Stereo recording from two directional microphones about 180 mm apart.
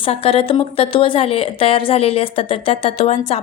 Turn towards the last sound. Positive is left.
turn(degrees=35)  # may be behind; listen again after turning